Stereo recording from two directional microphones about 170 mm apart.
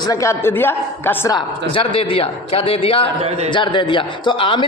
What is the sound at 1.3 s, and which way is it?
A man's voice, 30° left (ahead or behind).